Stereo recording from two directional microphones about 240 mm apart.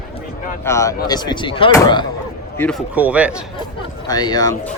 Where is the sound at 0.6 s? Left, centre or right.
Centre.